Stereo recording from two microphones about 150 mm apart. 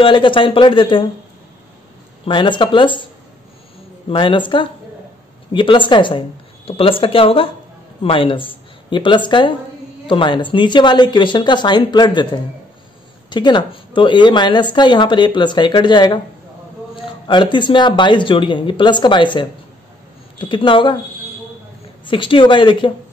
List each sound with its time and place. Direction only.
0.0 s speech: 35° left (ahead or behind)
2.2 s speech: 35° left (ahead or behind)
4.1 s speech: 35° left (ahead or behind)
22.0 s speech: 35° left (ahead or behind)